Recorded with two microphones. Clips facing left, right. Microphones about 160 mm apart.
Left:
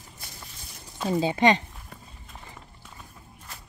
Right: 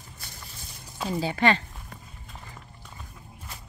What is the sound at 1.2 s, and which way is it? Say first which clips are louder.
Speech: left 2 dB; 20° left (ahead or behind).